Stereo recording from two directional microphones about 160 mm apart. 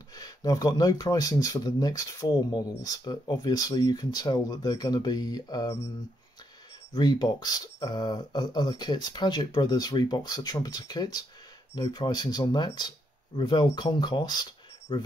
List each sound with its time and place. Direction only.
0.1 s speech: 25° left (ahead or behind)
6.9 s speech: 25° left (ahead or behind)